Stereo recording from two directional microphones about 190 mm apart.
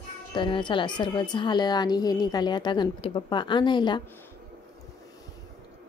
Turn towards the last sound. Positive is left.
turn(degrees=25)  # may be behind; listen again after turning